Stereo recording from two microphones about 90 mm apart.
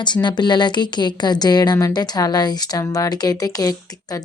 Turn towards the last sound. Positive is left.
turn(degrees=45)  # may be behind; listen again after turning